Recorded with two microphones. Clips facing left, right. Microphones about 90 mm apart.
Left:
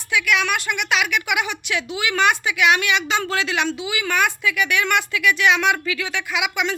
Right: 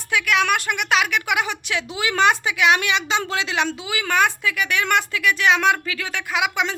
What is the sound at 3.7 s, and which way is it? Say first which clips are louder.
A woman's voice: left 1 dB; 40° right (ahead or behind).